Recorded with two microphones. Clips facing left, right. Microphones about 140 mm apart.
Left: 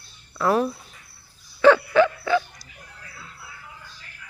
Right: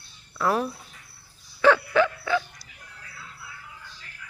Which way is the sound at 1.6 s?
Centre (ahead or behind).